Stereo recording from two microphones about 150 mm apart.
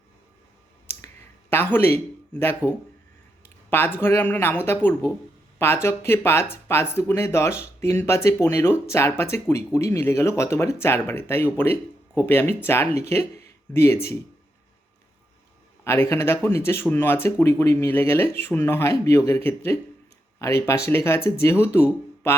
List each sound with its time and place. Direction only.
0.9 s a sound: 15° left (ahead or behind)
3.7 s speech: 15° left (ahead or behind)
15.8 s speech: 15° left (ahead or behind)